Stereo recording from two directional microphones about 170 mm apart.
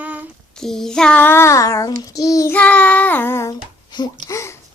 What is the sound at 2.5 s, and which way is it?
A child's voice, 10° left (ahead or behind).